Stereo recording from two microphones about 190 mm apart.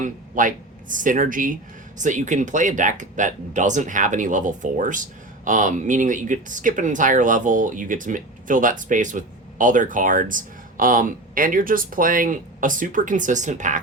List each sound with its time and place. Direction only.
0.0 s speech: 45° right (ahead or behind)